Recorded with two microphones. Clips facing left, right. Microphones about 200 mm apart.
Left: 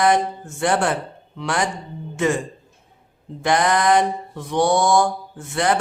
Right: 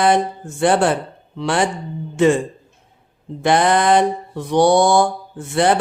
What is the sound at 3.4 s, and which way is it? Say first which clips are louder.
Mantra: right 3 dB; 30° right (ahead or behind).